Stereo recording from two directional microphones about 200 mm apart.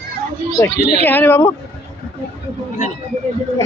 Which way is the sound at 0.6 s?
15° left (ahead or behind).